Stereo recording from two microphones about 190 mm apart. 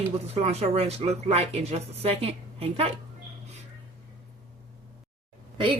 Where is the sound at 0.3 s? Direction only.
30° right (ahead or behind).